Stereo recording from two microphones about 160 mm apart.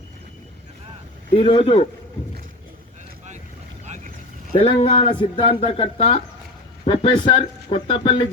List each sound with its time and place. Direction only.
1.4 s speech: 30° left (ahead or behind)
3.8 s boat: 50° right (ahead or behind)
4.5 s speech: 35° left (ahead or behind)